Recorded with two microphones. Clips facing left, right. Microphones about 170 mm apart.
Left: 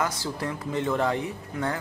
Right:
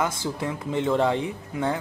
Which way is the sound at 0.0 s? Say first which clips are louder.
Right 2 dB; 20° right (ahead or behind).